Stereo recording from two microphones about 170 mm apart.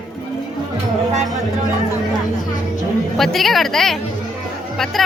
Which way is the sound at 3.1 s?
Centre (ahead or behind).